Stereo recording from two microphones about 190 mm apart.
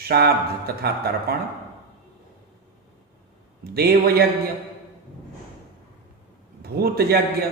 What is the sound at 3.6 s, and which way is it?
Speech, 55° right (ahead or behind).